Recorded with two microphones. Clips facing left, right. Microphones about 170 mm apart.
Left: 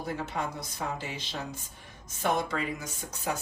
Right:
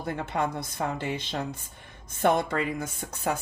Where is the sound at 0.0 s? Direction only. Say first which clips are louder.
Right 4 dB; 55° right (ahead or behind).